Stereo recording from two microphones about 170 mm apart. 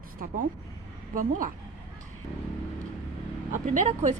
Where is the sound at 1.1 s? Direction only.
50° right (ahead or behind).